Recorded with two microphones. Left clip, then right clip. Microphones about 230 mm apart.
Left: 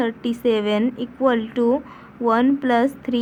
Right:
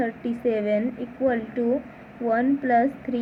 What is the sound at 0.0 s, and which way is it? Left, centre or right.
Speech, left.